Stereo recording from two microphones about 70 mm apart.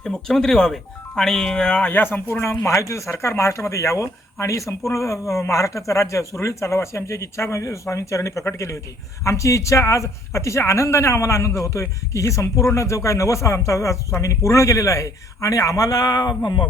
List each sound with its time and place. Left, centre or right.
0.0 s speech: centre
1.9 s speech: left
2.6 s speech: left
16.4 s speech: left